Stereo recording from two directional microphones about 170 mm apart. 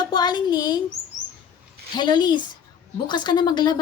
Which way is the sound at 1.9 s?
25° left (ahead or behind).